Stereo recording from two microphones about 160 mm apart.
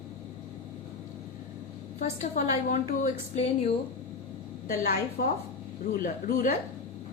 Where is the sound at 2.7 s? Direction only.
45° left (ahead or behind).